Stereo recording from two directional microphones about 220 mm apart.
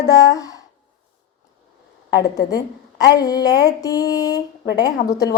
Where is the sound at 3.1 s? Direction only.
15° left (ahead or behind).